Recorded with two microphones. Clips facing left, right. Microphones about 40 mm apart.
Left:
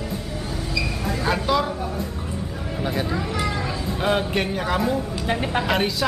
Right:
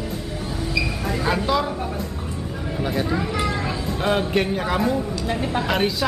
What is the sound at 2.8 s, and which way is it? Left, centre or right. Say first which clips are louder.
Speech: right 2 dB; centre.